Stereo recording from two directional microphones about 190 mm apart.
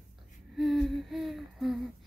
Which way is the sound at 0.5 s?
Centre (ahead or behind).